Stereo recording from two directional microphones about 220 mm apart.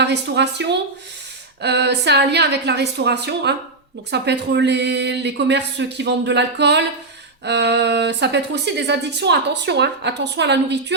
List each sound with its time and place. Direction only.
0.0 s speech: 50° right (ahead or behind)